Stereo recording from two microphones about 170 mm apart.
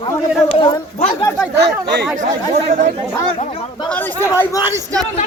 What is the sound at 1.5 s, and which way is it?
Speech, 80° right.